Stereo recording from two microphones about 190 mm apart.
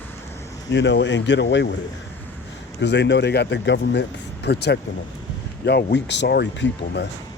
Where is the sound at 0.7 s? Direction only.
65° left (ahead or behind).